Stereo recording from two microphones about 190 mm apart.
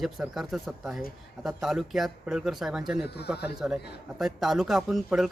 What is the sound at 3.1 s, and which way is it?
Speech, 60° left (ahead or behind).